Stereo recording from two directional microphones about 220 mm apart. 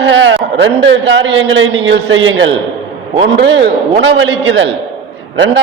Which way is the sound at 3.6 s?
50° right (ahead or behind).